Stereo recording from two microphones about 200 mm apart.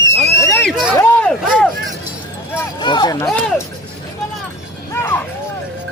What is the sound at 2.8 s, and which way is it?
Speech, 20° left (ahead or behind).